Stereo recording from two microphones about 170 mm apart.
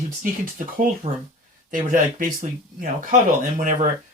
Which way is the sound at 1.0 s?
35° right (ahead or behind).